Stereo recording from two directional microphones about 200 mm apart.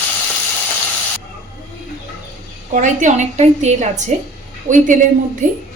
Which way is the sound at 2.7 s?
40° right (ahead or behind).